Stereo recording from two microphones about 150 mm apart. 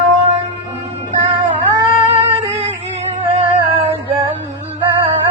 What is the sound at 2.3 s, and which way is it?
Music, 40° right (ahead or behind).